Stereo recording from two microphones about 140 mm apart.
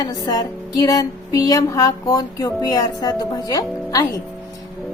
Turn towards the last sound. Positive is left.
turn(degrees=25)  # may be behind; listen again after turning